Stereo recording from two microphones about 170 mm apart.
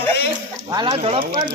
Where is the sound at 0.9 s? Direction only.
35° right (ahead or behind).